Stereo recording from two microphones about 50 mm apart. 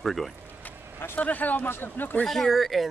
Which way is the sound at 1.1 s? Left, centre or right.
Left.